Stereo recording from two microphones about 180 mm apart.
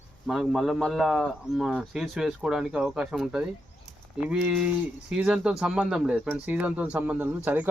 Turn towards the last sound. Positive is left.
turn(degrees=-10)  # may be behind; listen again after turning